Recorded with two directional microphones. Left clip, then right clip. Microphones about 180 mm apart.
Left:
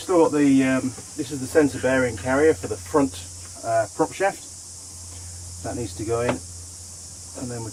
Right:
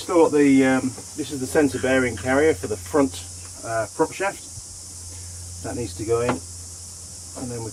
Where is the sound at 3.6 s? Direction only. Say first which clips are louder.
Left 1 dB; 5° right (ahead or behind).